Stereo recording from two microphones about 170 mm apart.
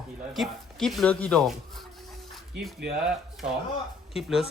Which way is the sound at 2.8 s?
65° right (ahead or behind).